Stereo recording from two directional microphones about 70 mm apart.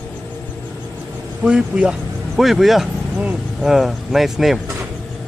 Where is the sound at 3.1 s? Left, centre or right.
Centre.